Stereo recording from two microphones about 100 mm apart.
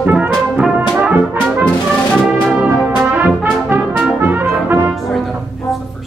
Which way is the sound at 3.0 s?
15° right (ahead or behind).